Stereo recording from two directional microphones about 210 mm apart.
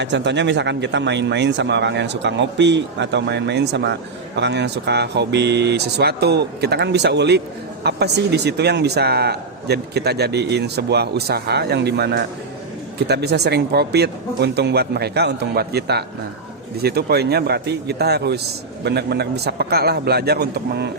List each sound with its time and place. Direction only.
0.0 s a man's voice: 55° right (ahead or behind)